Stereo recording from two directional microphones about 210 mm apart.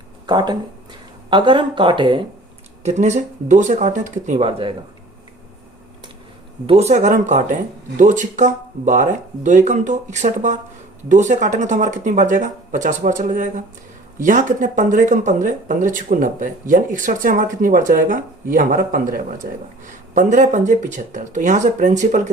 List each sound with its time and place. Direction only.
0.3 s speech: 20° right (ahead or behind)
2.8 s speech: 35° right (ahead or behind)
6.7 s speech: 30° right (ahead or behind)